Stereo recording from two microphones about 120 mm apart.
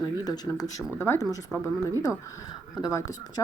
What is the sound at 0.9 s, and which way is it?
Speech, 20° left (ahead or behind).